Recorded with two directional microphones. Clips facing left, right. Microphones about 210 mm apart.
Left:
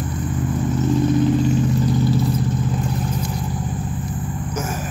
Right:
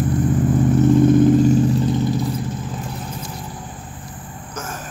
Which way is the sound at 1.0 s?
50° right (ahead or behind).